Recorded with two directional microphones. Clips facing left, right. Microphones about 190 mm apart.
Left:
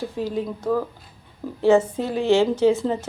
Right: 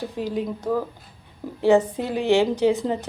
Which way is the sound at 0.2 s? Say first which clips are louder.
Even; 15° right (ahead or behind).